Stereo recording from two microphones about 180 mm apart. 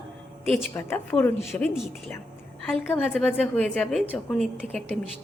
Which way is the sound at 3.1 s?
5° left (ahead or behind).